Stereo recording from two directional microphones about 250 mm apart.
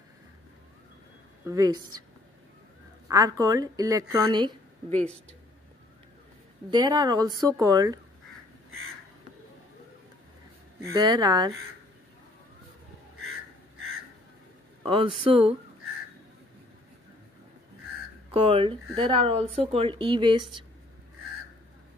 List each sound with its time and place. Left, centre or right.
1.4 s a woman's voice: centre
3.1 s a woman's voice: centre
6.7 s a woman's voice: centre
10.8 s a woman's voice: centre
14.8 s speech: right
18.3 s speech: right